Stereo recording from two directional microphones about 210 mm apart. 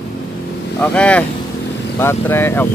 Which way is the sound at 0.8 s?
5° left (ahead or behind).